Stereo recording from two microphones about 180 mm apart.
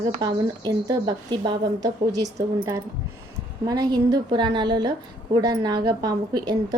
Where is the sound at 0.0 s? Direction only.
25° right (ahead or behind).